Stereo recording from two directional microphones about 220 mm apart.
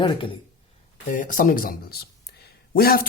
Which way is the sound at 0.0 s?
20° left (ahead or behind).